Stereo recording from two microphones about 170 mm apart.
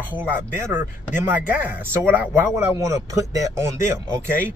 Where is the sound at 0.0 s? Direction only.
10° right (ahead or behind).